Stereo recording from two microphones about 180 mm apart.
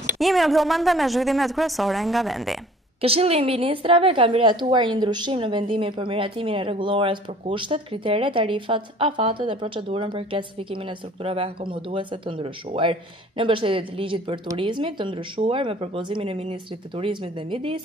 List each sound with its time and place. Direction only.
0.2 s a woman's voice: centre (ahead or behind)
3.0 s a woman's voice: 35° right (ahead or behind)